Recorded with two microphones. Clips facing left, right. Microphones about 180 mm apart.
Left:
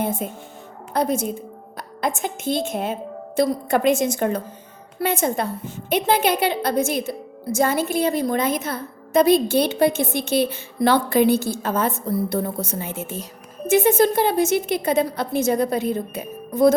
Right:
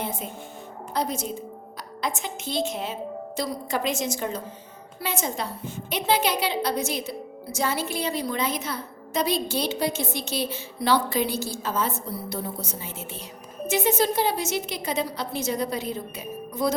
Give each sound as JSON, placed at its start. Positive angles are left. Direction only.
{"t": 0.0, "sound": "a woman's voice", "side_deg": 50}